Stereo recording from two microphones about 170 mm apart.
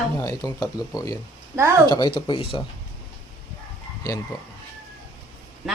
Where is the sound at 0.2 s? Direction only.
20° left (ahead or behind).